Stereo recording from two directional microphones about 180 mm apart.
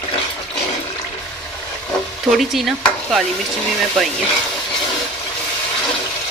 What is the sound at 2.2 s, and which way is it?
Stir, centre (ahead or behind).